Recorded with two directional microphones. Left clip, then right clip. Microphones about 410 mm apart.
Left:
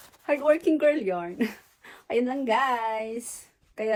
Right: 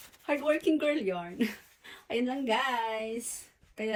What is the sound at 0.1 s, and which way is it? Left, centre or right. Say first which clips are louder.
Speech: left 6 dB; centre.